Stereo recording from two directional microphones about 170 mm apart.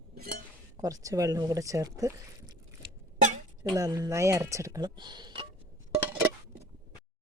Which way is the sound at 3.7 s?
20° right (ahead or behind).